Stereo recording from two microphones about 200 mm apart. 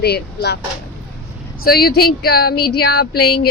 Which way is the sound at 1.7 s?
50° left (ahead or behind).